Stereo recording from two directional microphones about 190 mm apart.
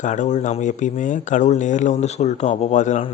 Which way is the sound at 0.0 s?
40° left (ahead or behind).